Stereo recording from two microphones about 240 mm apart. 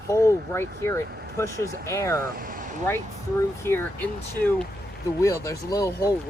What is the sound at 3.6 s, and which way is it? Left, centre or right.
Speech, centre.